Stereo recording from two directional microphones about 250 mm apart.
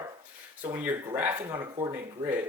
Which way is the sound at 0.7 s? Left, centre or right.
Centre.